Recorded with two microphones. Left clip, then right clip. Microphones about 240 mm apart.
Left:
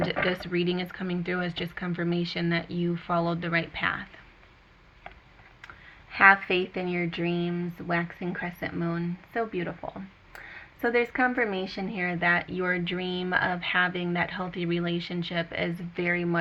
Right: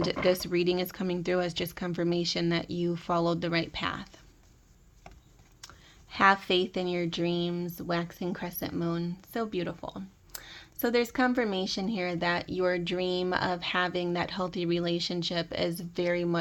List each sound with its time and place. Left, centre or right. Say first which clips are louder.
0.0 s speech: even; right
6.7 s speech: even; right